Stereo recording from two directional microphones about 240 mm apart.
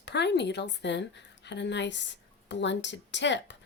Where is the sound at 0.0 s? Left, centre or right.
Left.